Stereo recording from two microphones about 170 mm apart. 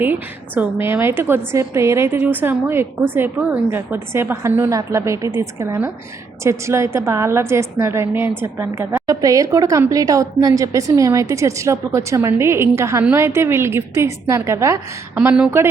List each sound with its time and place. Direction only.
0.0 s a woman's voice: 10° right (ahead or behind)